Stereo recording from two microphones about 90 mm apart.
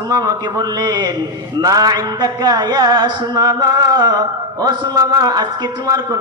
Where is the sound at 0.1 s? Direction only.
45° right (ahead or behind).